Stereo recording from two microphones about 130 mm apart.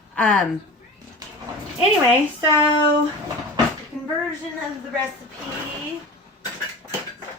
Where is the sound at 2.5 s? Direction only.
35° left (ahead or behind).